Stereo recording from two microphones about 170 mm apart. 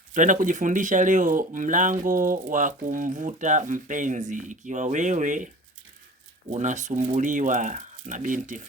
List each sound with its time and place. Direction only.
0.1 s speech: 50° right (ahead or behind)
6.5 s speech: 45° right (ahead or behind)